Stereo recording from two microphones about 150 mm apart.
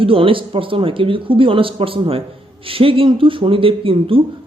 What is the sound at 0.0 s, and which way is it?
Speech, 35° right (ahead or behind).